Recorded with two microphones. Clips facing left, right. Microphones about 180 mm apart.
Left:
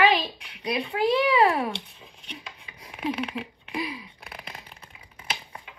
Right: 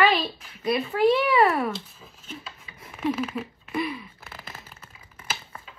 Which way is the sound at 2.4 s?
15° left (ahead or behind).